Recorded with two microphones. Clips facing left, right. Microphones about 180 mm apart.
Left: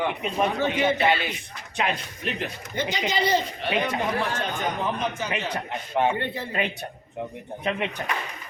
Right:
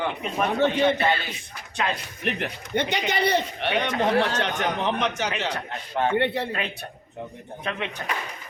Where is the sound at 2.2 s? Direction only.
65° right (ahead or behind).